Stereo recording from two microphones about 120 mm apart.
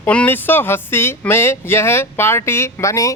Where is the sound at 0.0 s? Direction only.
15° left (ahead or behind).